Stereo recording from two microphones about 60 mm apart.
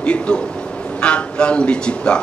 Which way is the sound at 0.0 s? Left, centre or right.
Left.